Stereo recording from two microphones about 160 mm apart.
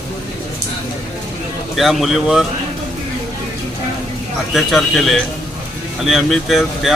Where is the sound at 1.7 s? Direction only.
Centre (ahead or behind).